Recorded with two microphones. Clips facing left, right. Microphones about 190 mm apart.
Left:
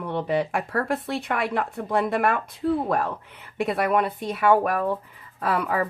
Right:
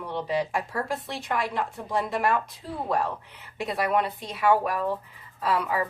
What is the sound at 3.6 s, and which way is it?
A woman's voice, 55° left (ahead or behind).